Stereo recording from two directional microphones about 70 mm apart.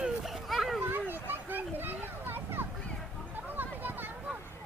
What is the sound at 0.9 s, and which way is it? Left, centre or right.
Children playing, right.